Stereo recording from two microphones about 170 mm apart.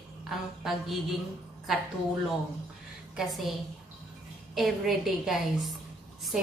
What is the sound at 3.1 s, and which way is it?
A woman's voice, centre (ahead or behind).